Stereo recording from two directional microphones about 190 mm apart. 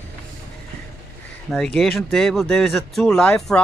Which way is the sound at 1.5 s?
5° left (ahead or behind).